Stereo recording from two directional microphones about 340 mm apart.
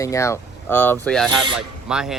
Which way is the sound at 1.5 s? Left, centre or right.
Centre.